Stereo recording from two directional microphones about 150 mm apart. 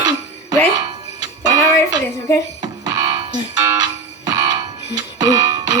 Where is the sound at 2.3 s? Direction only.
20° left (ahead or behind).